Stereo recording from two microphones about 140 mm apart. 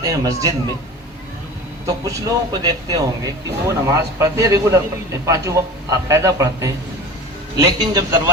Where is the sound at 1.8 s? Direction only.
25° right (ahead or behind).